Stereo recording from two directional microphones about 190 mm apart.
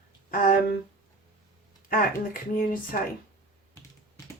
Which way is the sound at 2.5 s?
50° left (ahead or behind).